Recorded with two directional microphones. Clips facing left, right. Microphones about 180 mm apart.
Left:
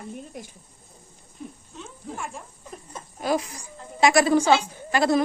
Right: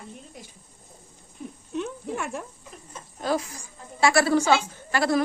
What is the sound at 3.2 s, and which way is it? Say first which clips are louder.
A woman's voice: left 1 dB; 15° left (ahead or behind).